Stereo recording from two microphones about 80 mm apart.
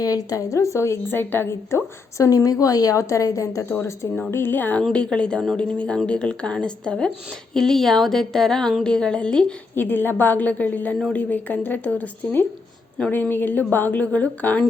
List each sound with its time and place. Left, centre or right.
0.0 s a woman's voice: left
4.8 s speech: centre
9.7 s speech: left